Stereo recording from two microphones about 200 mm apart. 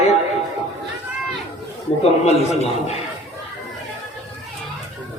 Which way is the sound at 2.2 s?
35° left (ahead or behind).